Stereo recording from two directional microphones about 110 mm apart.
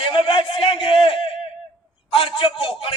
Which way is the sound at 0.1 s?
50° left (ahead or behind).